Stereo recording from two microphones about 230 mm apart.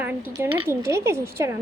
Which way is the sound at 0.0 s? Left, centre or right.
Centre.